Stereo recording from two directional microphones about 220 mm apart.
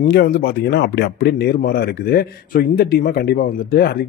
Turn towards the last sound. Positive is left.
turn(degrees=45)  # may be behind; listen again after turning